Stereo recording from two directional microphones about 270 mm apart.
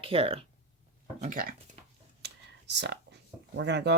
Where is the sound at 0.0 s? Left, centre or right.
Centre.